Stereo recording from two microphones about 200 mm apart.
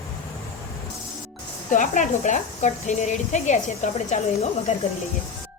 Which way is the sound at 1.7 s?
40° left (ahead or behind).